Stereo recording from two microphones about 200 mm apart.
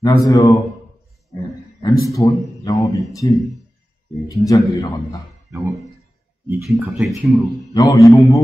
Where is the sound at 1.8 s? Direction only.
15° left (ahead or behind).